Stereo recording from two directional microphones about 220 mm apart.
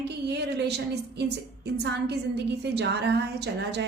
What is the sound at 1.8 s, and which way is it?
A woman's voice, 50° right (ahead or behind).